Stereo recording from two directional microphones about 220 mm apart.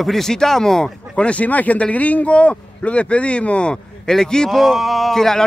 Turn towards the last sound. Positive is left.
turn(degrees=0)  # may be behind; listen again after turning